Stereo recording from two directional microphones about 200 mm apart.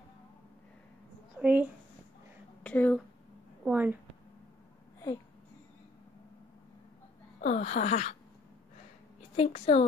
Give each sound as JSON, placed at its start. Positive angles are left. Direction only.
{"t": 1.4, "sound": "a woman's voice", "side_deg": -5}
{"t": 2.6, "sound": "speech", "side_deg": 5}
{"t": 3.6, "sound": "a woman's voice", "side_deg": -10}
{"t": 7.3, "sound": "speech", "side_deg": 40}
{"t": 9.4, "sound": "speech", "side_deg": 30}